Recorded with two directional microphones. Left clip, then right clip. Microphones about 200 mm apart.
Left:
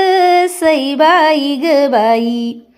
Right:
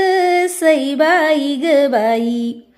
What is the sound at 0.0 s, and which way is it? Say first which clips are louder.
Music: left 4 dB; centre (ahead or behind).